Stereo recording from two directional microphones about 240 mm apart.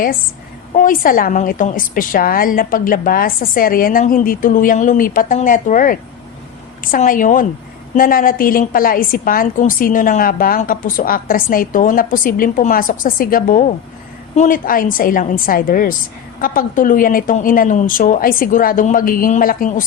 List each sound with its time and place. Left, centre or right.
0.7 s a woman's voice: left